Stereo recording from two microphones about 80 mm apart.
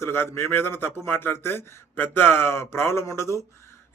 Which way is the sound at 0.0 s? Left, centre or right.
Left.